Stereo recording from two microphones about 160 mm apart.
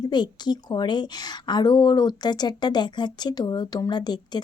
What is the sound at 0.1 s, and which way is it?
Speech, 25° left (ahead or behind).